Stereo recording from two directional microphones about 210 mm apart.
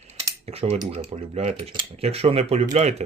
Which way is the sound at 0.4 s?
30° right (ahead or behind).